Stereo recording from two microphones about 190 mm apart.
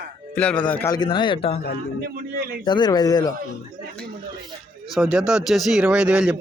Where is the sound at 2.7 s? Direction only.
20° left (ahead or behind).